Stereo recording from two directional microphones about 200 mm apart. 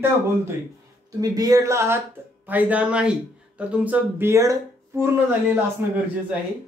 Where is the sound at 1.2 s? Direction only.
20° right (ahead or behind).